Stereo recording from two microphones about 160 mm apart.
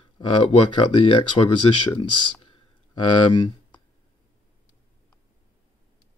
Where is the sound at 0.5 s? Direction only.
35° left (ahead or behind).